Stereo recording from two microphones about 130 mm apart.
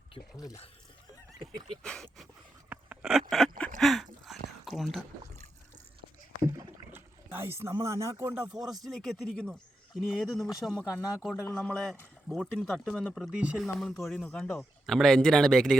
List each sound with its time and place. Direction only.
0.3 s speech: 25° left (ahead or behind)
1.8 s speech: 5° left (ahead or behind)
2.6 s a sound: 10° right (ahead or behind)
4.8 s speech: centre (ahead or behind)
6.4 s rowboat: 25° right (ahead or behind)
7.3 s speech: 20° right (ahead or behind)
8.6 s a man's voice: centre (ahead or behind)